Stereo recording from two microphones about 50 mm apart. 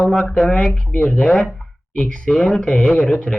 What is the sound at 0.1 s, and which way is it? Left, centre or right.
Speech, centre.